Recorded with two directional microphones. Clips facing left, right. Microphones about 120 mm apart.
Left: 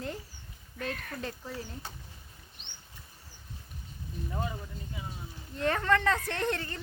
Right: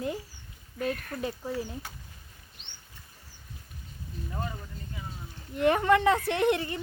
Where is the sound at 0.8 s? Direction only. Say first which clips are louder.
Right 5 dB; 5° right (ahead or behind).